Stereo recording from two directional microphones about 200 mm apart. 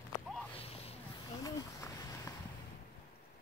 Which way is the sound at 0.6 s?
30° left (ahead or behind).